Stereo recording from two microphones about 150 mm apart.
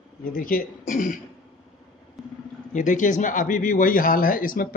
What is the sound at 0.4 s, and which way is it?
Speech, 70° left (ahead or behind).